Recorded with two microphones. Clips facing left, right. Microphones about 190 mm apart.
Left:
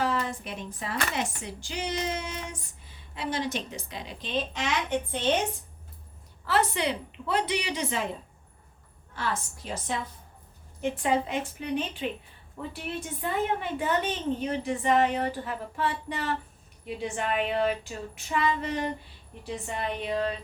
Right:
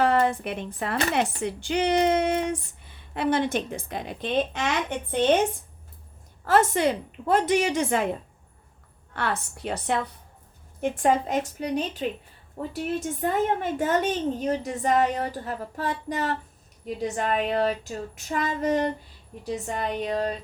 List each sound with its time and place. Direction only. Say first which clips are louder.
0.0 s speech: right 7 dB; 60° right (ahead or behind)
6.4 s a woman's voice: right 6 dB; 45° right (ahead or behind)
9.1 s speech: right 3 dB; 65° right (ahead or behind)
10.8 s a woman's voice: right 4 dB; 50° right (ahead or behind)